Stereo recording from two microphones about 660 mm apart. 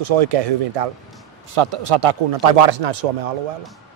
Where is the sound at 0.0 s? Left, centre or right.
Right.